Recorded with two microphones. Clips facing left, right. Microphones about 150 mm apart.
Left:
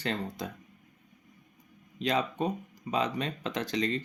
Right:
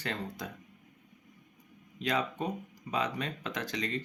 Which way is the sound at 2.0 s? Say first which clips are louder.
Left 3 dB; 25° left (ahead or behind).